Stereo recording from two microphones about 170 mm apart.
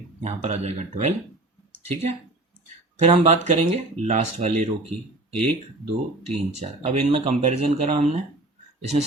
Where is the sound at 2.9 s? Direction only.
40° right (ahead or behind).